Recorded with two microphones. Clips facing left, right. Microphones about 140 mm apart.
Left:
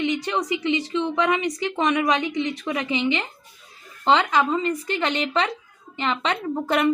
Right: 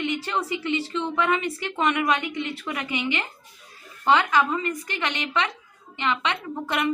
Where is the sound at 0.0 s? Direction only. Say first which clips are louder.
Left 3 dB; 20° left (ahead or behind).